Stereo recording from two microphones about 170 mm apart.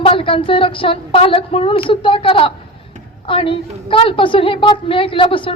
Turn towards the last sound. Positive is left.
turn(degrees=30)  # may be behind; listen again after turning